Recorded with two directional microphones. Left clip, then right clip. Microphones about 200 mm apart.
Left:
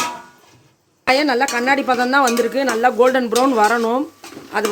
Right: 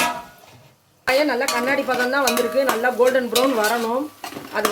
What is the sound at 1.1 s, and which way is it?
Speech, 60° left (ahead or behind).